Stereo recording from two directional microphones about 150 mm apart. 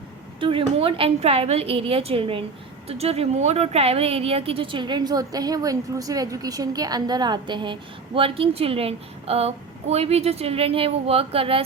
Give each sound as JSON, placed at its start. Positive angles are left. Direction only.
{"t": 0.3, "sound": "a woman's voice", "side_deg": -35}